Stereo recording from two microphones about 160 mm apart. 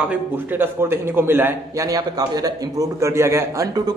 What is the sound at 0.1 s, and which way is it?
A man's voice, 10° right (ahead or behind).